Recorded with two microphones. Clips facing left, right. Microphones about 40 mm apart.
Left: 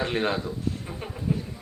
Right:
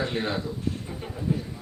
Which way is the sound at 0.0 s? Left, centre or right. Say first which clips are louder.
Left 2 dB; left.